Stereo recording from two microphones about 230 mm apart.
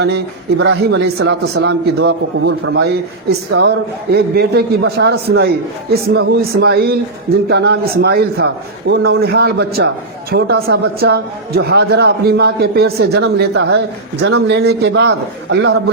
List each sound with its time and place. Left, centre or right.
0.6 s a man's voice: right